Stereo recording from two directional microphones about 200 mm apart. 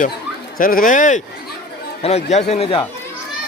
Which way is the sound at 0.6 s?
45° left (ahead or behind).